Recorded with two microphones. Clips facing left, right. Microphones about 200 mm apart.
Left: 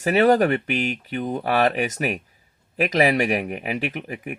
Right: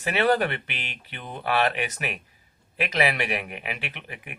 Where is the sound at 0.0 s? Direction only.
45° left (ahead or behind).